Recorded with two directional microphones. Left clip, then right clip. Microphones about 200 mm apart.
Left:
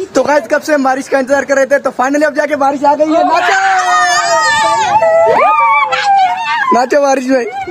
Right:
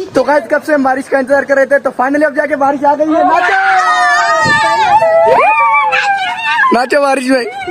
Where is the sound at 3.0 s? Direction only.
15° left (ahead or behind).